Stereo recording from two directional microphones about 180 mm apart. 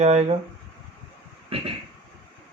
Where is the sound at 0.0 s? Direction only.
40° right (ahead or behind).